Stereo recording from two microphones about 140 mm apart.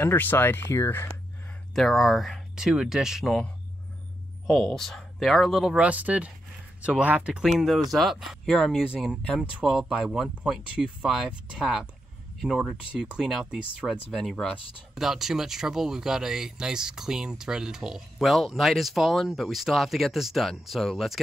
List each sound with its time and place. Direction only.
0.0 s speech: 15° left (ahead or behind)
1.8 s speech: centre (ahead or behind)
4.5 s speech: 5° left (ahead or behind)